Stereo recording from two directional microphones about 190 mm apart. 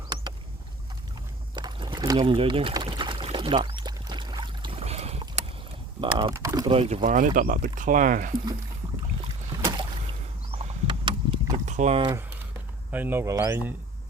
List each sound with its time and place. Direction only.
1.5 s pour: 25° right (ahead or behind)
6.0 s speech: 25° right (ahead or behind)
6.7 s speech: 35° right (ahead or behind)
9.6 s rowboat: 20° right (ahead or behind)
11.6 s speech: 40° right (ahead or behind)
12.9 s speech: 10° right (ahead or behind)